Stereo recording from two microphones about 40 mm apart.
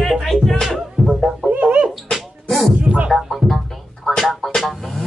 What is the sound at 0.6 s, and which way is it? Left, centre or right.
Music, centre.